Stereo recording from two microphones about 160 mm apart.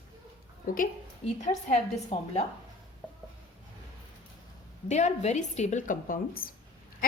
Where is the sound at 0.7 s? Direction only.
60° left (ahead or behind).